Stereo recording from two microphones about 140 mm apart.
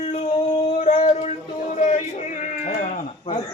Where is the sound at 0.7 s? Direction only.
55° left (ahead or behind).